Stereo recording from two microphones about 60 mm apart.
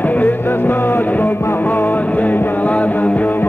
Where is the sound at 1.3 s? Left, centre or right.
Left.